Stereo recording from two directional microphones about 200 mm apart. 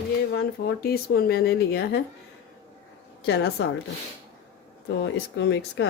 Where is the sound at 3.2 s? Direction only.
55° left (ahead or behind).